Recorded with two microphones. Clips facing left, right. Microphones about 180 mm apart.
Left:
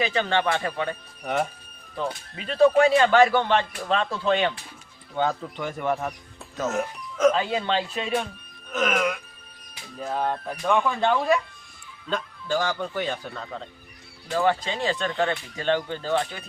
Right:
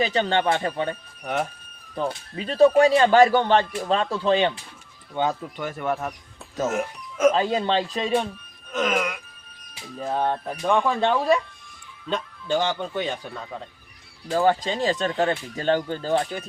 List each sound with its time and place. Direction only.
0.0 s speech: 30° right (ahead or behind)
1.2 s speech: centre (ahead or behind)
2.3 s speech: 35° right (ahead or behind)
5.1 s speech: 10° right (ahead or behind)
7.3 s speech: 35° right (ahead or behind)
8.8 s music: 10° right (ahead or behind)
10.0 s speech: 20° right (ahead or behind)
10.5 s music: 15° right (ahead or behind)
10.8 s speech: 30° right (ahead or behind)
14.3 s speech: 35° right (ahead or behind)